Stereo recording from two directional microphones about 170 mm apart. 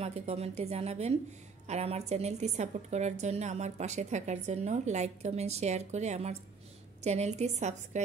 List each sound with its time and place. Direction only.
0.0 s a woman's voice: 35° right (ahead or behind)